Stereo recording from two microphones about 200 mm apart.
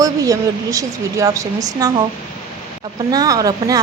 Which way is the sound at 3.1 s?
20° right (ahead or behind).